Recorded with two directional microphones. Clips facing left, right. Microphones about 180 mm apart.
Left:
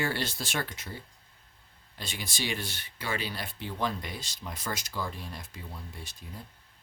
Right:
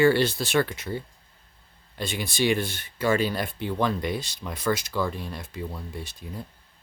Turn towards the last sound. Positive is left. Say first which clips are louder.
# right 9 dB
turn(degrees=-80)